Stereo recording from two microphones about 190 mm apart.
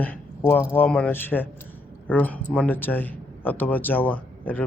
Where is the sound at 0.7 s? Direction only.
10° left (ahead or behind).